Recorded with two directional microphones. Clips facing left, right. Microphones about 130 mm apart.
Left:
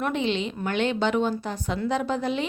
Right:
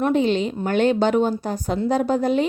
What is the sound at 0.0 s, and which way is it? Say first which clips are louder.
A woman's voice: right 7 dB; 40° right (ahead or behind).